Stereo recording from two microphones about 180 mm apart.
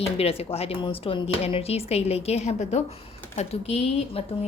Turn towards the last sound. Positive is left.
turn(degrees=35)  # may be behind; listen again after turning